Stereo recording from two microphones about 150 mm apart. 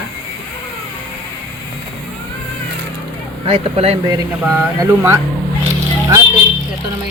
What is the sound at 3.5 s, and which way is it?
Speech, 40° right (ahead or behind).